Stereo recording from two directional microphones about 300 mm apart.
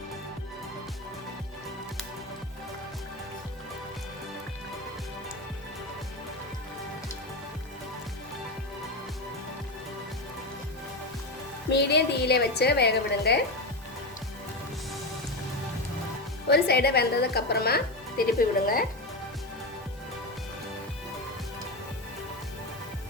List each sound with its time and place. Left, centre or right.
11.7 s speech: left
16.5 s speech: left